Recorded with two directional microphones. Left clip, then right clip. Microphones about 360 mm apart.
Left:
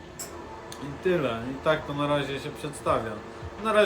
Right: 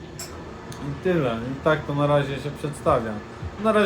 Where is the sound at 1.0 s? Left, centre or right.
Centre.